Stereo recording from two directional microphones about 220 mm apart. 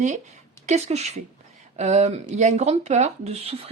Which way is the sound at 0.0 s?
30° right (ahead or behind).